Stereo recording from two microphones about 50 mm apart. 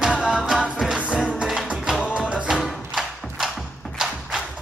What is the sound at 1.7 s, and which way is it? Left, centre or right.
Music, centre.